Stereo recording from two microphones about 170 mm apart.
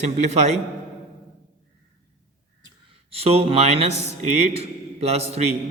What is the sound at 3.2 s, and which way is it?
Speech, 35° right (ahead or behind).